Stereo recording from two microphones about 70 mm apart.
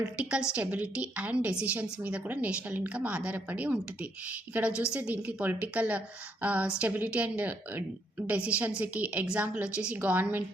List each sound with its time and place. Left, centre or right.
0.2 s a woman's voice: centre